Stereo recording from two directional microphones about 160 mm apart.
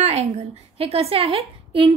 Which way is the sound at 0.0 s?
45° right (ahead or behind).